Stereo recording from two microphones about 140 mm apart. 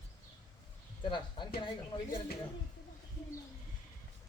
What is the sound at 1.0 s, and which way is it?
Speech, 35° left (ahead or behind).